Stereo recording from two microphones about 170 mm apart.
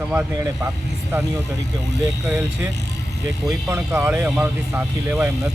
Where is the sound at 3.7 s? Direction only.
10° right (ahead or behind).